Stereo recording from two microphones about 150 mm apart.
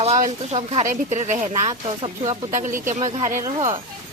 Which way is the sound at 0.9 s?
50° right (ahead or behind).